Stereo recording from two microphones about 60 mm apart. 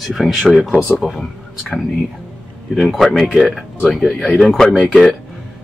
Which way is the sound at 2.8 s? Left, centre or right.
Centre.